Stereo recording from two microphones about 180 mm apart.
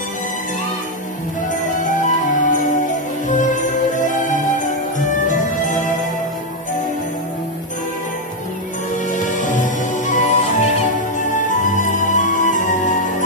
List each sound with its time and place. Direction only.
1.6 s music: 45° left (ahead or behind)
9.1 s music: 45° left (ahead or behind)